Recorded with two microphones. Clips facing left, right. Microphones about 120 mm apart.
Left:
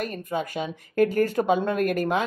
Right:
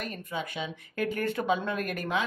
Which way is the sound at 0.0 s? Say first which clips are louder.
Left 7 dB; 45° left (ahead or behind).